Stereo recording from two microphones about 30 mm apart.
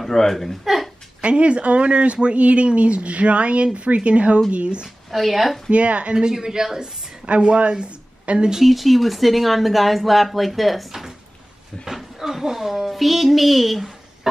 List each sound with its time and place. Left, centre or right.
0.0 s speech: centre
1.2 s speech: right
5.1 s a woman's voice: centre
5.7 s speech: right
6.1 s speech: centre
7.2 s speech: right
8.3 s speech: right
8.6 s a woman's voice: centre
10.9 s a sound: centre
11.8 s a woman's voice: centre